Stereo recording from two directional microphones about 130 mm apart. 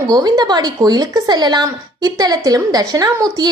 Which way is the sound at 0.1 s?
30° right (ahead or behind).